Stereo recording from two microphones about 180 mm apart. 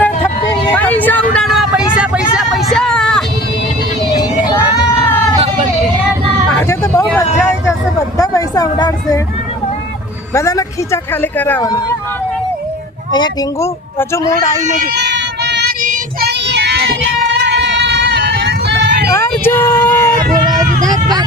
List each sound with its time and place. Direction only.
0.7 s vehicle: 10° left (ahead or behind)
4.1 s vehicle: 20° left (ahead or behind)
6.5 s vehicle: 15° left (ahead or behind)
8.2 s a sound: 20° left (ahead or behind)
10.3 s speech: 20° left (ahead or behind)
13.1 s speech: 25° left (ahead or behind)
14.9 s a sound: 70° right (ahead or behind)
15.8 s child singing: 45° right (ahead or behind)
16.5 s child singing: 70° right (ahead or behind)
17.2 s vehicle: 80° right
19.1 s child singing: 10° left (ahead or behind)
20.8 s a sound: 20° right (ahead or behind)